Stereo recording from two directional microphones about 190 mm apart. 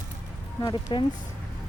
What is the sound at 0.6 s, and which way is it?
Speech, 25° left (ahead or behind).